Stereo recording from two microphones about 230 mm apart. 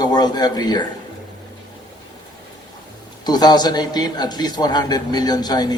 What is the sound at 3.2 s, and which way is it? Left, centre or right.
A man's voice, centre.